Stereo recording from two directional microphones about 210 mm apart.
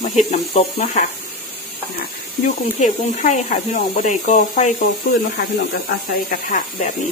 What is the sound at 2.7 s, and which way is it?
Speech, 35° left (ahead or behind).